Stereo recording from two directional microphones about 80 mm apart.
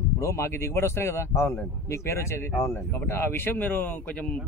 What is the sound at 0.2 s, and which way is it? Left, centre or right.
Speech, left.